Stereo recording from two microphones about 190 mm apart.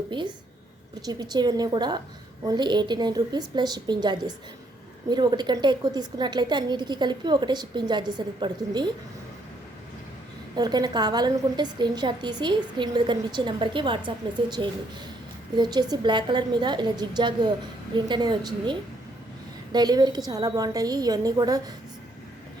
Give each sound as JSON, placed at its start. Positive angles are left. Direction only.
{"t": 1.0, "sound": "a woman's voice", "side_deg": -20}
{"t": 10.5, "sound": "a woman's voice", "side_deg": -20}
{"t": 15.5, "sound": "a woman's voice", "side_deg": -20}